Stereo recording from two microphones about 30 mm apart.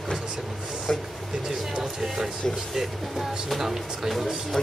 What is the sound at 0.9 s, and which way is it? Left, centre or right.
Speech, left.